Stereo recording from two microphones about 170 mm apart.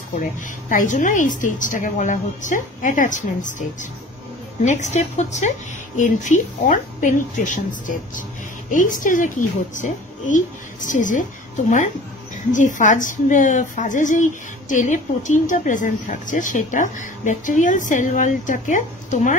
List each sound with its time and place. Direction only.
0.2 s a woman's voice: 50° left (ahead or behind)
4.6 s a woman's voice: 45° left (ahead or behind)